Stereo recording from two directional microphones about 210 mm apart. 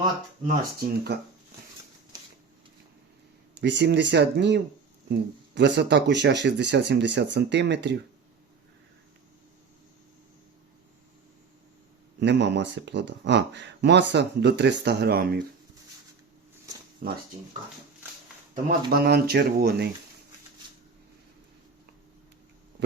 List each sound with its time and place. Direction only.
0.4 s speech: 50° right (ahead or behind)
3.6 s speech: 55° right (ahead or behind)
12.2 s speech: 55° right (ahead or behind)
17.0 s speech: 50° right (ahead or behind)
18.9 s speech: 50° right (ahead or behind)